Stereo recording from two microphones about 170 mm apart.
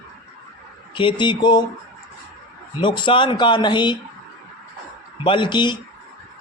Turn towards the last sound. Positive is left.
turn(degrees=25)  # may be behind; listen again after turning